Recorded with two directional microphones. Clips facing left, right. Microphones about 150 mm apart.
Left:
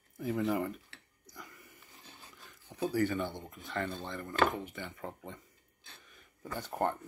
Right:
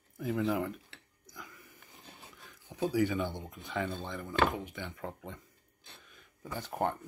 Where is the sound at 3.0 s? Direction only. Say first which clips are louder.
Right 1 dB; 10° right (ahead or behind).